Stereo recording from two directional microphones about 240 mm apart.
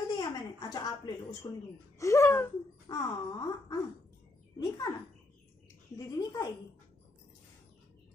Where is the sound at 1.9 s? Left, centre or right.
Centre.